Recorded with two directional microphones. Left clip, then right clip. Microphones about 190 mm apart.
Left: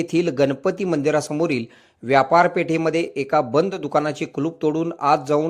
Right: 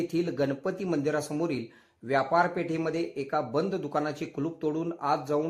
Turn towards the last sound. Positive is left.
turn(degrees=30)  # may be behind; listen again after turning